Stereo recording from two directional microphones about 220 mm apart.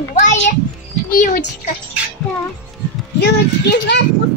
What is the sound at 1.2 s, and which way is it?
Speech, 40° left (ahead or behind).